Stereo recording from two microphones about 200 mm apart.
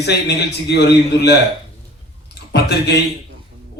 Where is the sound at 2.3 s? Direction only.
55° left (ahead or behind).